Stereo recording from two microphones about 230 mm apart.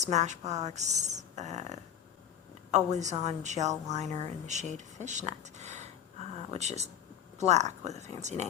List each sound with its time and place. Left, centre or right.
0.0 s a woman's voice: right